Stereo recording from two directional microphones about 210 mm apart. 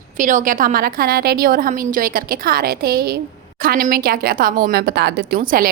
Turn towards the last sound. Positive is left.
turn(degrees=-45)  # may be behind; listen again after turning